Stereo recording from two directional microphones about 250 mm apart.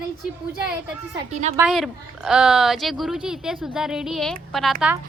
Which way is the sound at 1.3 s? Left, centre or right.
Right.